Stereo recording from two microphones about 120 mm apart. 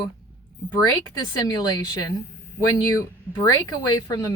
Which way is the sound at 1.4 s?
35° left (ahead or behind).